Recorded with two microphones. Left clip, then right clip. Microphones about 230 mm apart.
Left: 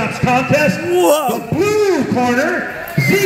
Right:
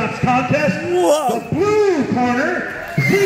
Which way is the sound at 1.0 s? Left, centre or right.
Centre.